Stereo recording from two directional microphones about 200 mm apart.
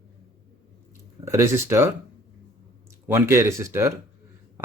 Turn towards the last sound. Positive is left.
turn(degrees=-15)  # may be behind; listen again after turning